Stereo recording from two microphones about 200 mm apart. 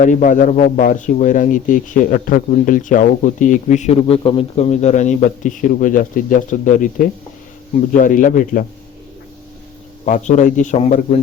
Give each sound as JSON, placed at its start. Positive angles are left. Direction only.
{"t": 0.0, "sound": "a man's voice", "side_deg": 40}
{"t": 10.1, "sound": "a man's voice", "side_deg": 40}